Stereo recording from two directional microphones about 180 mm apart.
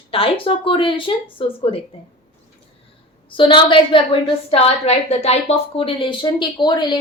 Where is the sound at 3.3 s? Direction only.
30° left (ahead or behind).